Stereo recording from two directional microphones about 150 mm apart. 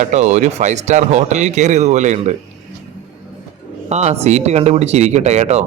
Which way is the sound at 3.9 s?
45° right (ahead or behind).